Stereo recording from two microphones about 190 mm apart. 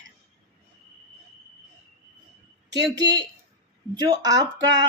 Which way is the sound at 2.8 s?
20° right (ahead or behind).